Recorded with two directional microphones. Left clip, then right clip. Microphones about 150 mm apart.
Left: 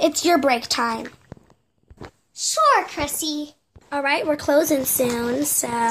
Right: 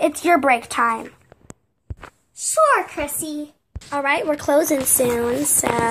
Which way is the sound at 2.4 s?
20° left (ahead or behind).